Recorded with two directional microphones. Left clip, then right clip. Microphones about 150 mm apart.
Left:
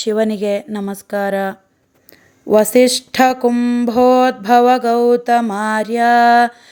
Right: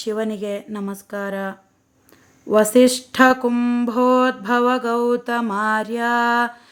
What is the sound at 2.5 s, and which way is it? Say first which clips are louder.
Mantra: left 3 dB; 30° left (ahead or behind).